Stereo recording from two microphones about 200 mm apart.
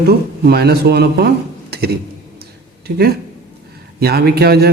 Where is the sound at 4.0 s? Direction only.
50° right (ahead or behind).